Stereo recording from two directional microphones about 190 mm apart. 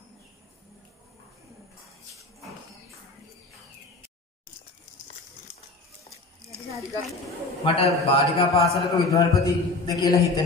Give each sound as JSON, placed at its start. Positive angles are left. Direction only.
{"t": 6.5, "sound": "a sound", "side_deg": -15}
{"t": 7.6, "sound": "a man's voice", "side_deg": 30}
{"t": 8.6, "sound": "a man's voice", "side_deg": 0}
{"t": 9.4, "sound": "a man's voice", "side_deg": 20}